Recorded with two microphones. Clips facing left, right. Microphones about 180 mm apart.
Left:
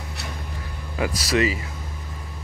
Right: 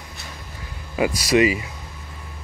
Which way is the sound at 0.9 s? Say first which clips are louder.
Right 4 dB; 15° right (ahead or behind).